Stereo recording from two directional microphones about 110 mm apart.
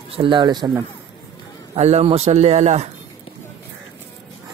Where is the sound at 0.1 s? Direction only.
50° right (ahead or behind).